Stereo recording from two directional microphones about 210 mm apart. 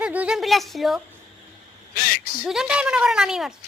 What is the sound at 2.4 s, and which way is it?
A woman's voice, 5° right (ahead or behind).